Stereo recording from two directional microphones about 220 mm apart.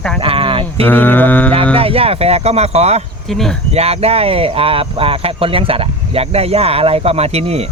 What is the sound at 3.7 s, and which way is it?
Speech, 30° right (ahead or behind).